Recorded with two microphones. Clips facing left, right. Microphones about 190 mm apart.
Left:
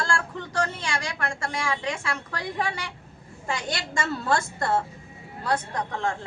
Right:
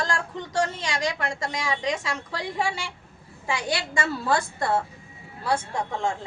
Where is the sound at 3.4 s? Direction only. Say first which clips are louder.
Right 3 dB; 5° right (ahead or behind).